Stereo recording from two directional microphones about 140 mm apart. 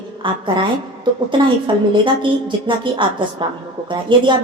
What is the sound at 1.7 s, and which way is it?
A woman's voice, 35° right (ahead or behind).